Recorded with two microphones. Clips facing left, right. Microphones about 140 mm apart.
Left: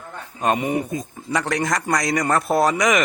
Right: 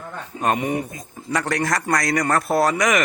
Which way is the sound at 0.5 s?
20° left (ahead or behind).